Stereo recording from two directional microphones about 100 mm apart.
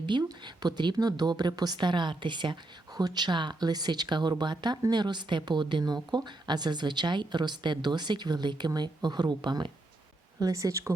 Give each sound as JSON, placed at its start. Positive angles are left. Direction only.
{"t": 0.0, "sound": "a woman's voice", "side_deg": -45}
{"t": 10.4, "sound": "speech", "side_deg": -30}